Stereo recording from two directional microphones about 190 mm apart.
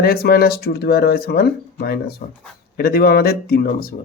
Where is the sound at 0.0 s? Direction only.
55° left (ahead or behind).